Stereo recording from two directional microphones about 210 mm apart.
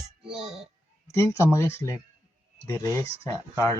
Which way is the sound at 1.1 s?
15° left (ahead or behind).